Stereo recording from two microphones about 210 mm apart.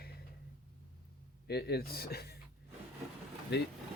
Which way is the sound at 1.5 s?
50° left (ahead or behind).